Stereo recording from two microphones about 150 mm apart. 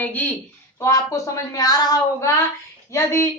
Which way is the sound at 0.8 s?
20° left (ahead or behind).